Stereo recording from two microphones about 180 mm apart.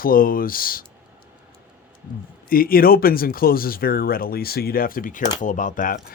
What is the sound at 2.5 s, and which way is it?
Speech, 55° left (ahead or behind).